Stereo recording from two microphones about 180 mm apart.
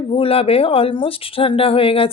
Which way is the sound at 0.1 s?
35° left (ahead or behind).